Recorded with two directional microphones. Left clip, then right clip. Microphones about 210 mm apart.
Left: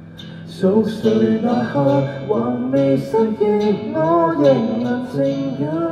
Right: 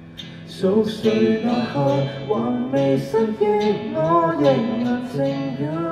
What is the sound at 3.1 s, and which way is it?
Music, centre (ahead or behind).